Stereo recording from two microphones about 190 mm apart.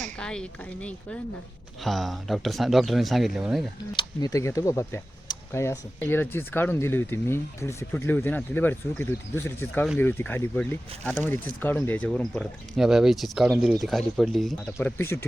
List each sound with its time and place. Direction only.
0.0 s speech: 5° left (ahead or behind)
3.9 s speech: 20° left (ahead or behind); by 14.8 s centre (ahead or behind)
14.8 s speech: 10° left (ahead or behind)